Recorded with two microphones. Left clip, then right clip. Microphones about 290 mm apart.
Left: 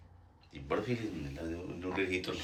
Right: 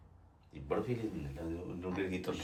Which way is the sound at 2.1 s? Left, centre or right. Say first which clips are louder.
Left 3 dB; right.